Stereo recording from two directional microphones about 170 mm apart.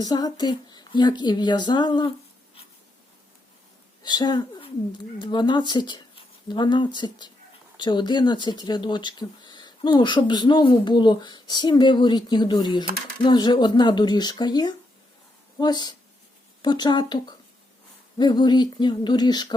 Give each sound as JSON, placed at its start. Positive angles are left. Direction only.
{"t": 0.0, "sound": "speech", "side_deg": 20}
{"t": 4.0, "sound": "speech", "side_deg": 25}